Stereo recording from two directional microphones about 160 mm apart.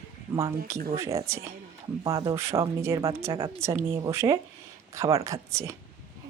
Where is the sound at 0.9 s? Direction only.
15° right (ahead or behind).